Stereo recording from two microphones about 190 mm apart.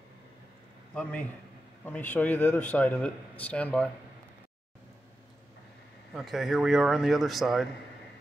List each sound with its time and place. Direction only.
1.9 s a man's voice: 10° left (ahead or behind)
6.1 s speech: centre (ahead or behind)